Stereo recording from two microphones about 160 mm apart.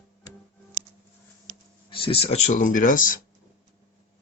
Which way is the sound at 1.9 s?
35° left (ahead or behind).